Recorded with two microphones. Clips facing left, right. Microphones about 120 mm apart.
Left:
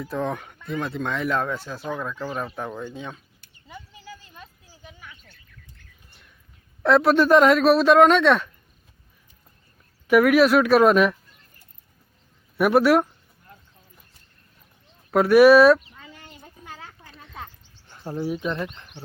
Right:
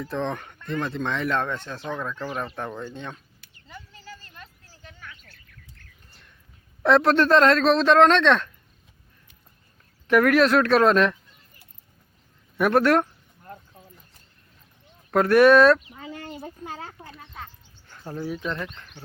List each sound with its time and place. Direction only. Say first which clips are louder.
0.0 s speech: left 1 dB; 5° left (ahead or behind)
3.7 s a sound: left 1 dB; 15° left (ahead or behind)
6.8 s speech: left 1 dB; centre (ahead or behind)
10.1 s speech: left 2 dB; 5° left (ahead or behind)
12.5 s speech: left 2 dB; 5° left (ahead or behind)
15.1 s speech: left 2 dB; 5° left (ahead or behind)
16.2 s a sound: right 8 dB; 35° right (ahead or behind)
17.8 s speech: left 3 dB; 15° left (ahead or behind)